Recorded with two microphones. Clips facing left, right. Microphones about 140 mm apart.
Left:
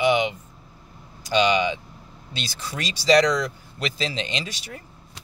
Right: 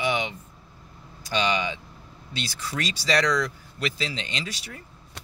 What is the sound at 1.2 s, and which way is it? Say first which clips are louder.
Speech: left 5 dB; 20° left (ahead or behind).